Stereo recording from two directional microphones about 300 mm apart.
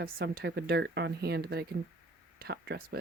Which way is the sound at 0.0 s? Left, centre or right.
Right.